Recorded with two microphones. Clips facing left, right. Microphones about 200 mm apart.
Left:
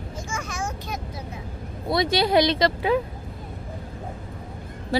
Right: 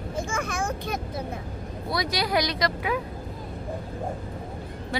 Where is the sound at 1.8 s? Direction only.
25° left (ahead or behind).